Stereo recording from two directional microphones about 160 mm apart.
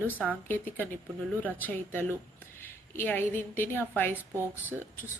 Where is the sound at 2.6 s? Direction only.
15° left (ahead or behind).